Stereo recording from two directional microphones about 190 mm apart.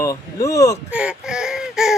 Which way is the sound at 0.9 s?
5° right (ahead or behind).